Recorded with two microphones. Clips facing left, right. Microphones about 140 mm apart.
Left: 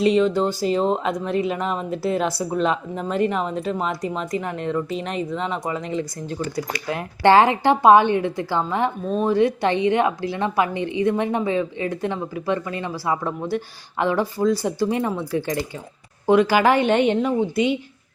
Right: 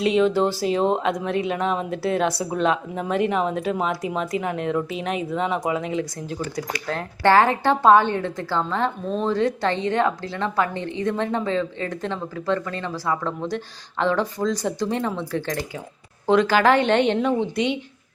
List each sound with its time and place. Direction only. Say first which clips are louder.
0.0 s speech: left 1 dB; centre (ahead or behind)
6.8 s a woman's voice: left 3 dB; 15° left (ahead or behind)